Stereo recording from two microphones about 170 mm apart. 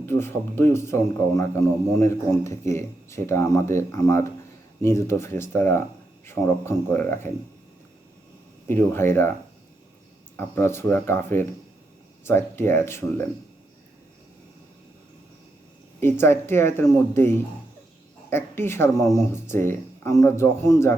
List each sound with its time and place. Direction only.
0.0 s speech: 15° left (ahead or behind)
8.6 s speech: 15° left (ahead or behind)
10.3 s speech: 15° left (ahead or behind)
16.0 s a woman's voice: 15° left (ahead or behind)